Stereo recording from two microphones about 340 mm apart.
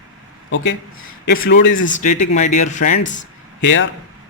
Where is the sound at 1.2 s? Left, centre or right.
Left.